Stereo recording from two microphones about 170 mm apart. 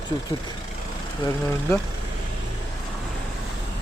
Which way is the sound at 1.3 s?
15° left (ahead or behind).